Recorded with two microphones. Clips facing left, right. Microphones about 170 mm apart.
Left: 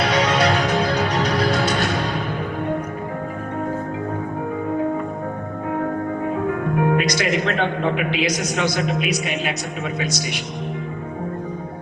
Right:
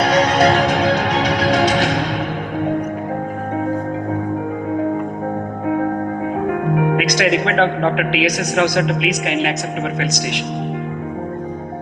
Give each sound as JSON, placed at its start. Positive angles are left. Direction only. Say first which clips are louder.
{"t": 0.0, "sound": "music", "louder": "right 4 dB", "side_deg": -45}
{"t": 0.5, "sound": "music", "louder": "right 4 dB", "side_deg": -80}
{"t": 6.5, "sound": "a man's voice", "louder": "right 2 dB", "side_deg": -75}